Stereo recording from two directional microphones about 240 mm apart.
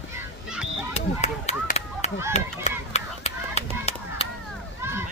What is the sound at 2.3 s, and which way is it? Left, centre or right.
Run, left.